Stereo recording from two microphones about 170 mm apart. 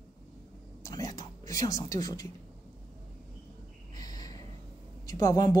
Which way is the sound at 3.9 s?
20° left (ahead or behind).